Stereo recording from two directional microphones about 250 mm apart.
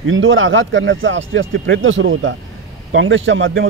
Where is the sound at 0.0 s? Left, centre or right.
Right.